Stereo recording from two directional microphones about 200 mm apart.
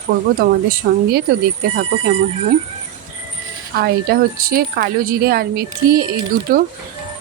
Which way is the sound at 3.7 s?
50° right (ahead or behind).